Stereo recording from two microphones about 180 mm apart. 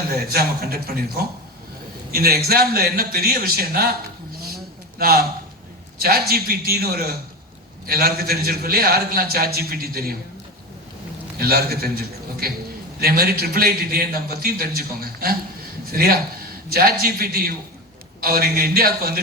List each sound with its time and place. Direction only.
0.3 s a man's voice: 60° right (ahead or behind)
4.9 s a man's voice: 55° right (ahead or behind)
11.3 s a man's voice: 60° right (ahead or behind)